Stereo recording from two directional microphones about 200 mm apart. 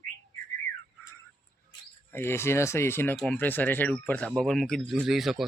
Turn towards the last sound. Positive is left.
turn(degrees=0)  # may be behind; listen again after turning